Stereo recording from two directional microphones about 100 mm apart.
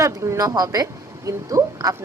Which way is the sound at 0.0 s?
30° right (ahead or behind).